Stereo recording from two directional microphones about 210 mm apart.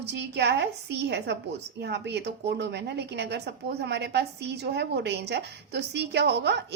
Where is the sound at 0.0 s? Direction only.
55° right (ahead or behind).